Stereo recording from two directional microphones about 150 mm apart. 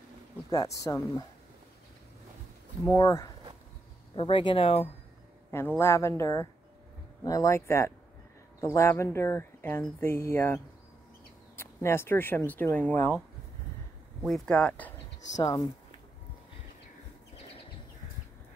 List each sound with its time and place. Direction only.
0.7 s speech: 20° left (ahead or behind)
2.8 s speech: 20° left (ahead or behind)
4.1 s speech: 35° left (ahead or behind)
5.5 s speech: 15° left (ahead or behind)
14.2 s speech: centre (ahead or behind)
15.3 s speech: 25° left (ahead or behind)